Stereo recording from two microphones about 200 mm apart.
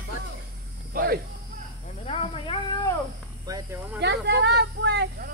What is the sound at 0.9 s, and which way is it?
Speech, 45° right (ahead or behind).